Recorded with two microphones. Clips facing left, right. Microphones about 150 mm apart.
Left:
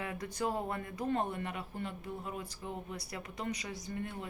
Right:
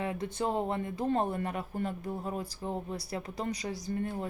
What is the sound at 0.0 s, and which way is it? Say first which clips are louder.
Speech: right 4 dB; 25° right (ahead or behind).